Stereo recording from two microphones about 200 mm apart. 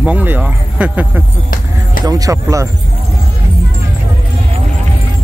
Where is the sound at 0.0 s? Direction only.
10° right (ahead or behind).